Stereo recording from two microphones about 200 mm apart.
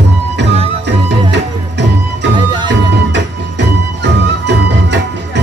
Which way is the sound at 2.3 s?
25° right (ahead or behind).